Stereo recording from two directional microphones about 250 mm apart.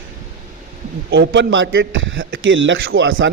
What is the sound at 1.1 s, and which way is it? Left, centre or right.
A man's voice, right.